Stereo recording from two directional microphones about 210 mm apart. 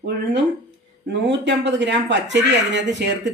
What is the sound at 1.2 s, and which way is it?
A woman's voice, 55° right (ahead or behind).